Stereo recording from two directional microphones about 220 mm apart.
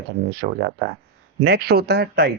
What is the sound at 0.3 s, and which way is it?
Speech, 45° right (ahead or behind).